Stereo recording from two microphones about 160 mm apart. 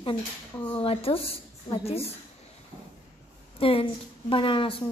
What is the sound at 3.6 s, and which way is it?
A woman's voice, 35° left (ahead or behind).